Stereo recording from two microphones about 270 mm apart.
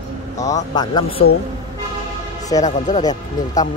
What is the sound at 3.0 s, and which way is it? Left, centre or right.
Speech, centre.